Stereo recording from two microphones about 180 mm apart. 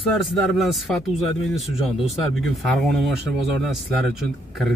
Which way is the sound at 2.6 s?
Centre (ahead or behind).